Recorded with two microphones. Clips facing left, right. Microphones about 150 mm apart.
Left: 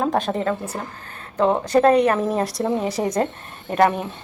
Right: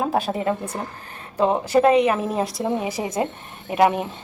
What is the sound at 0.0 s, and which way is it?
Speech, 5° right (ahead or behind).